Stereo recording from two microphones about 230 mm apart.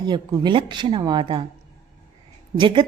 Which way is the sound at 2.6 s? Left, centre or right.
Right.